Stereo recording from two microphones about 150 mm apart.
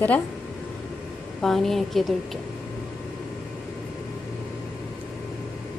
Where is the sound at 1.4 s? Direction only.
Centre (ahead or behind).